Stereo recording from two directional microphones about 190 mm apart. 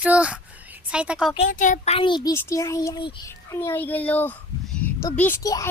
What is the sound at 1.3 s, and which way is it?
A child's voice, 40° left (ahead or behind).